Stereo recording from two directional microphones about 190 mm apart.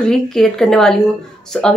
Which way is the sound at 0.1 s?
Centre (ahead or behind).